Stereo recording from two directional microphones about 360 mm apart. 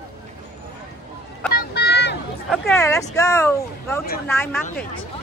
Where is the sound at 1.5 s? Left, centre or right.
Left.